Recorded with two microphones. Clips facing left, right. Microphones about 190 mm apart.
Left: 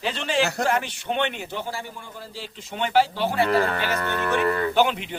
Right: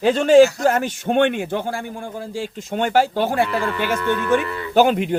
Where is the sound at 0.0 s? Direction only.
45° right (ahead or behind).